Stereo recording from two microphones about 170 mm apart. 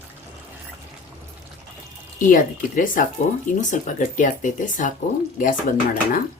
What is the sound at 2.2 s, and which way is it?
Speech, 50° left (ahead or behind).